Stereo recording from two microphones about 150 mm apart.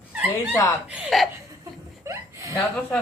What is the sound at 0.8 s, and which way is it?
Speech, 5° right (ahead or behind).